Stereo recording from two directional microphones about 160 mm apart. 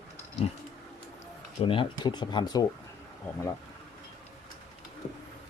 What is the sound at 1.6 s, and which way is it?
Speech, 35° left (ahead or behind).